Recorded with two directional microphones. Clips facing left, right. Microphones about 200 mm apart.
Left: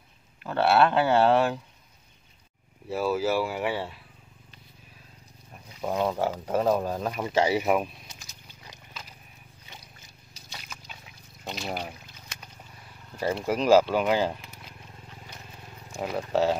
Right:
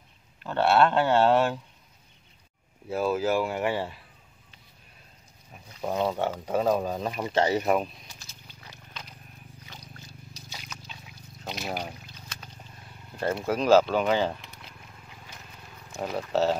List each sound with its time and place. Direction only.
0.4 s speech: 5° left (ahead or behind)
2.9 s speech: 5° left (ahead or behind)
5.5 s speech: centre (ahead or behind)
8.1 s wild animals: 15° left (ahead or behind)
11.4 s boat: 5° right (ahead or behind)
13.2 s speech: 5° left (ahead or behind)
16.2 s speech: 10° left (ahead or behind)